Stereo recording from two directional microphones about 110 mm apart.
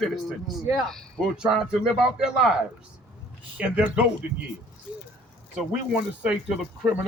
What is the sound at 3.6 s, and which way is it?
Speech, 10° right (ahead or behind).